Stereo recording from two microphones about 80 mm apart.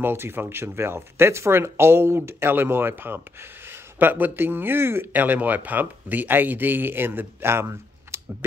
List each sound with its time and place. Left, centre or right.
0.0 s speech: right
8.1 s typing: right